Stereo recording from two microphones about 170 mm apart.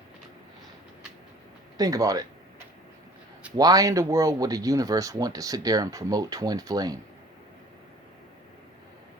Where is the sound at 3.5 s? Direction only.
20° right (ahead or behind).